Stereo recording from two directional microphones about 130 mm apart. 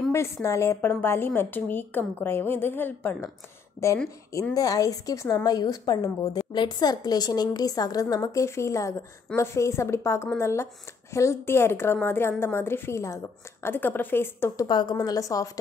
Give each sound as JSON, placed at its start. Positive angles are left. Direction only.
{"t": 0.1, "sound": "a woman's voice", "side_deg": 20}
{"t": 4.6, "sound": "a woman's voice", "side_deg": 30}
{"t": 14.7, "sound": "a woman's voice", "side_deg": 35}